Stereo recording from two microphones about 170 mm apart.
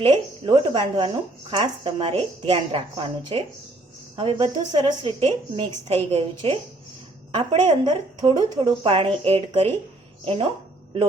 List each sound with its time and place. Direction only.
0.0 s a woman's voice: 30° right (ahead or behind)